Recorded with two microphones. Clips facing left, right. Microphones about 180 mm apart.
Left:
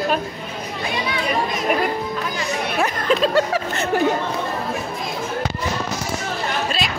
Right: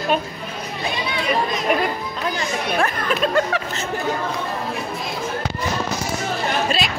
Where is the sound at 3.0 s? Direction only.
30° left (ahead or behind).